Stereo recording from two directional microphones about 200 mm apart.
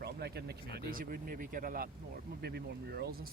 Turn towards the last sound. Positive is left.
turn(degrees=-50)  # may be behind; listen again after turning